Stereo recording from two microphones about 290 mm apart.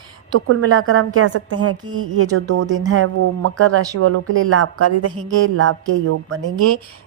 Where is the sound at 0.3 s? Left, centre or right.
Right.